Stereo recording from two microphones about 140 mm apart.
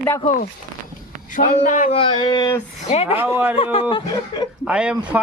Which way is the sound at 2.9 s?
45° left (ahead or behind).